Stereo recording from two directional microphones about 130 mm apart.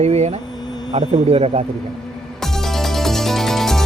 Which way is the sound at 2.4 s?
5° left (ahead or behind).